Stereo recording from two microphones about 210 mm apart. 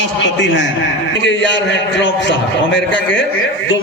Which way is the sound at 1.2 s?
60° left (ahead or behind).